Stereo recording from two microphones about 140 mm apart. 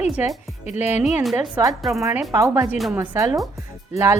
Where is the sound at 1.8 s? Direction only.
Centre (ahead or behind).